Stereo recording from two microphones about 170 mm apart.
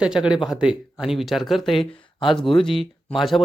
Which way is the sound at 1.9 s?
30° left (ahead or behind).